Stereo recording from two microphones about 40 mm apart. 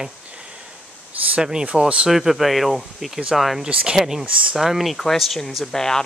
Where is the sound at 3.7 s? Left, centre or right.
Right.